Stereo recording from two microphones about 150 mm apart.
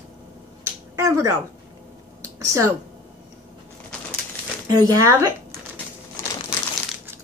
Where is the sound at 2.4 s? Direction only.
20° right (ahead or behind).